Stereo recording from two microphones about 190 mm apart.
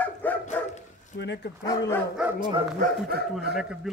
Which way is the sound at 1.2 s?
65° left (ahead or behind).